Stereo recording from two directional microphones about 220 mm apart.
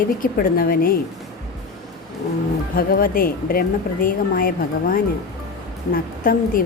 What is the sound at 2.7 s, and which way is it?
A woman's voice, 40° left (ahead or behind).